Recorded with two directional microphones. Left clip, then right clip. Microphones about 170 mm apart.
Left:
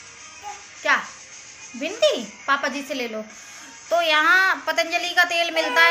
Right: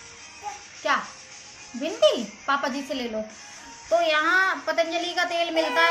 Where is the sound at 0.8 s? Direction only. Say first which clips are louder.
Left 4 dB; centre (ahead or behind).